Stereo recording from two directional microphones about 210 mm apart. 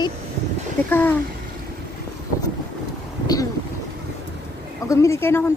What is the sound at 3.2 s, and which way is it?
Boat, 15° left (ahead or behind).